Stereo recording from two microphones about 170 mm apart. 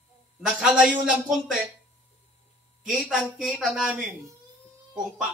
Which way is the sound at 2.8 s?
Centre (ahead or behind).